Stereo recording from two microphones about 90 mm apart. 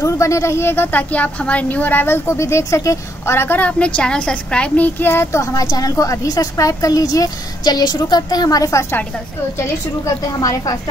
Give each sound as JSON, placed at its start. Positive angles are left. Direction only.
{"t": 0.0, "sound": "speech", "side_deg": 35}
{"t": 10.4, "sound": "a woman's voice", "side_deg": 45}